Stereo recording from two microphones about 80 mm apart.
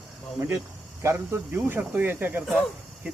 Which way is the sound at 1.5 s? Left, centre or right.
Right.